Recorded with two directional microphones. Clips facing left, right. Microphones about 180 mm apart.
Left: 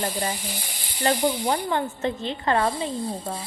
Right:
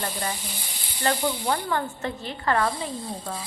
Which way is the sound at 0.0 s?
25° left (ahead or behind).